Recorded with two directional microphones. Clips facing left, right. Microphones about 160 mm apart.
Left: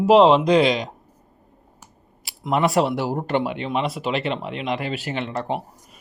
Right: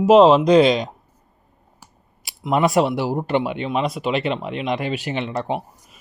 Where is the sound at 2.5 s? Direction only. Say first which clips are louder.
Right 2 dB; 15° right (ahead or behind).